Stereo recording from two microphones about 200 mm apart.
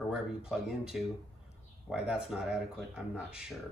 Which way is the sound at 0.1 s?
5° right (ahead or behind).